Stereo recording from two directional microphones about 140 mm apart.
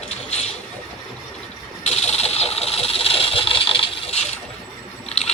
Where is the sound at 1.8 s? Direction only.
50° left (ahead or behind).